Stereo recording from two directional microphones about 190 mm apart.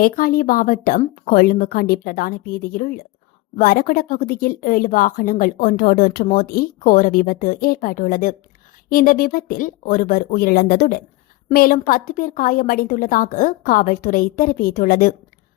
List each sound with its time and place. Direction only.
0.0 s speech: 50° left (ahead or behind)